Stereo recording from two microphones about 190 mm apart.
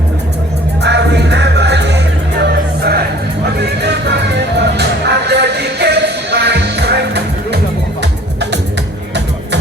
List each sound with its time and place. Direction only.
0.8 s music: 65° right (ahead or behind)